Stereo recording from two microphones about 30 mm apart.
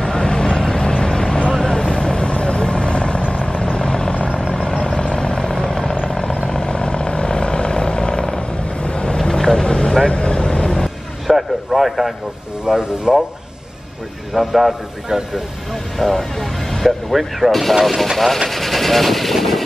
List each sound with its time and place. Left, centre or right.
0.0 s vehicle: left
9.8 s vehicle: centre
10.0 s vehicle: left
11.2 s a sound: centre
12.6 s speech: right
14.3 s speech: centre
15.0 s speech: centre
15.7 s speech: centre
17.1 s speech: centre
18.5 s vehicle: centre